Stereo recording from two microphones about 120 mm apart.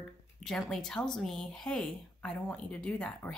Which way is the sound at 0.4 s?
5° left (ahead or behind).